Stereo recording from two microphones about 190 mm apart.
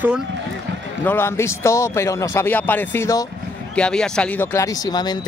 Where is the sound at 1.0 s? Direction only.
10° left (ahead or behind).